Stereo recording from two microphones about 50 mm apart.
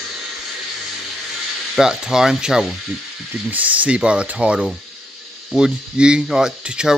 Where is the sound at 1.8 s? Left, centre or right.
Centre.